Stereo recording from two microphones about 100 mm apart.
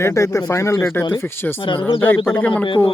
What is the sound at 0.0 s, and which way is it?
Speech, 30° left (ahead or behind).